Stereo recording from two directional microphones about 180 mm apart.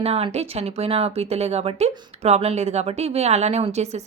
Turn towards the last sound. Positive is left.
turn(degrees=-35)  # may be behind; listen again after turning